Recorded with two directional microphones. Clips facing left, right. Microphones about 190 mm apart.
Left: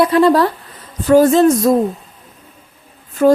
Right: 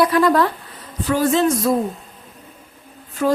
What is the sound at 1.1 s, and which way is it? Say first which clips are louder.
Speech: left 8 dB; 45° left (ahead or behind).